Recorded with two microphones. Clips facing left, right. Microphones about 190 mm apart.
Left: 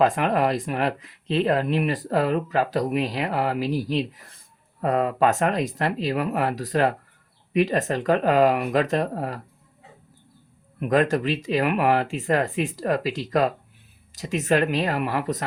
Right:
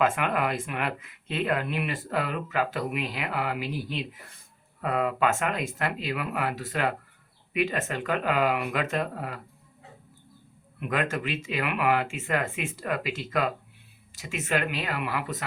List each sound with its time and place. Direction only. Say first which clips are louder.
0.0 s speech: left 5 dB; 35° left (ahead or behind)
10.8 s speech: left 8 dB; 40° left (ahead or behind)